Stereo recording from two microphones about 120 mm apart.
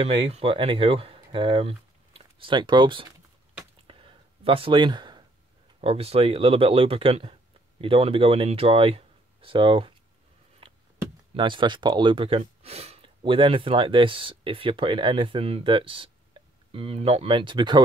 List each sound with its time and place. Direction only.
0.0 s speech: 55° right (ahead or behind)
3.8 s a sound: 50° right (ahead or behind)
5.8 s speech: 55° right (ahead or behind)
11.3 s speech: 45° right (ahead or behind)